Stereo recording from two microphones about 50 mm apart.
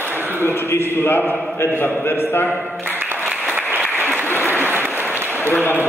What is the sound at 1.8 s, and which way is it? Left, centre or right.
Speech, left.